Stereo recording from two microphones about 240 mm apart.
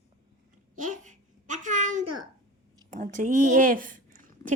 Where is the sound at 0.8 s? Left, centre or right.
Right.